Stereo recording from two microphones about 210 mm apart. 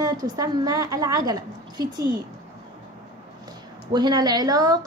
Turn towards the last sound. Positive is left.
turn(degrees=-15)  # may be behind; listen again after turning